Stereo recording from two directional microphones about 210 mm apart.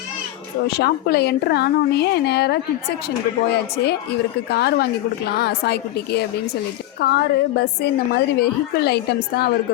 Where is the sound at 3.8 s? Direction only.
50° left (ahead or behind).